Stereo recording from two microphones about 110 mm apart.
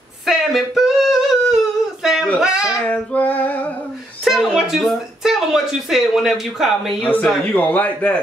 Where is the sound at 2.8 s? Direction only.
15° left (ahead or behind).